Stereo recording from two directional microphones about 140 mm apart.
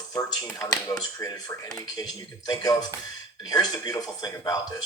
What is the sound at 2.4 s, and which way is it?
Speech, 30° left (ahead or behind).